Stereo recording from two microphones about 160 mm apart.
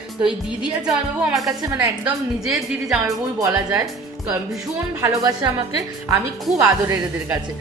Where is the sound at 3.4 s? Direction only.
20° right (ahead or behind).